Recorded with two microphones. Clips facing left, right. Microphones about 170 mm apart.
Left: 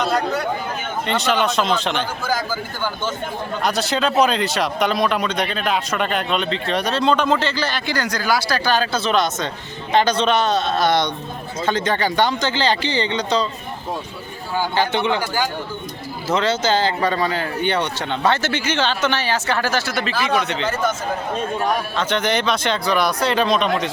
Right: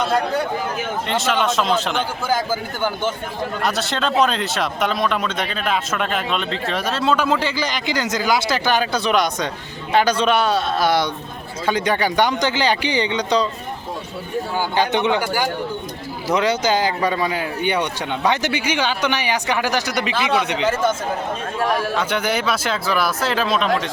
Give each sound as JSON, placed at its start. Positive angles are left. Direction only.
{"t": 1.0, "sound": "speech", "side_deg": 0}
{"t": 3.6, "sound": "speech", "side_deg": 0}
{"t": 14.8, "sound": "speech", "side_deg": -15}
{"t": 21.9, "sound": "speech", "side_deg": -10}